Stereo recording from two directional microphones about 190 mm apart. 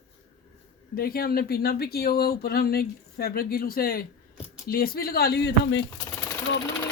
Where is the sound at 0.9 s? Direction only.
50° left (ahead or behind).